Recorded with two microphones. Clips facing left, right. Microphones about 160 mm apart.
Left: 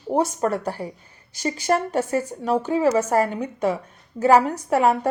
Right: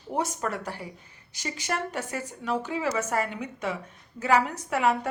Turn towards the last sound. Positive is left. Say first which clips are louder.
# left 6 dB
turn(degrees=40)  # may be behind; listen again after turning